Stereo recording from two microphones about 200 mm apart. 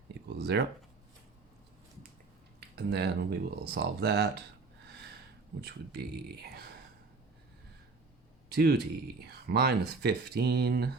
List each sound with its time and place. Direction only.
0.3 s speech: 55° right (ahead or behind)
2.6 s speech: 55° right (ahead or behind)
5.5 s speech: 55° right (ahead or behind)
8.4 s speech: 55° right (ahead or behind)